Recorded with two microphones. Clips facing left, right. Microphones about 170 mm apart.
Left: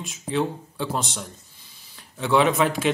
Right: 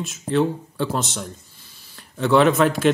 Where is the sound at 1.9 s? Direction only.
10° left (ahead or behind).